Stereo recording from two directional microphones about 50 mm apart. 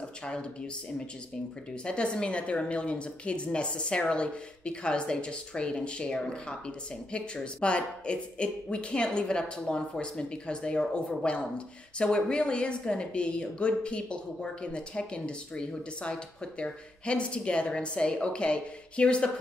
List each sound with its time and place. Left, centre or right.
0.2 s speech: centre
1.9 s speech: centre